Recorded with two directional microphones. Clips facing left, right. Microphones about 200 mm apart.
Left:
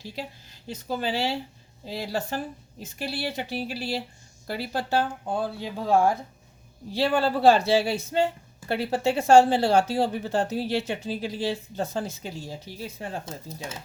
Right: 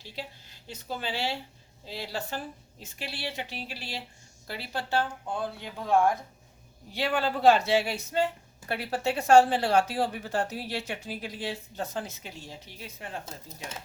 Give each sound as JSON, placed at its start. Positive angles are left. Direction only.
{"t": 0.9, "sound": "a woman's voice", "side_deg": 45}